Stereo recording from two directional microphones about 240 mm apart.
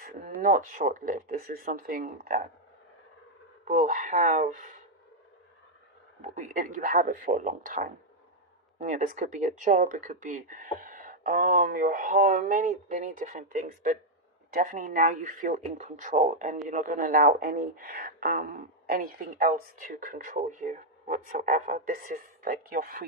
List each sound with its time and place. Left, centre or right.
0.0 s speech: right
3.7 s speech: right
6.2 s speech: right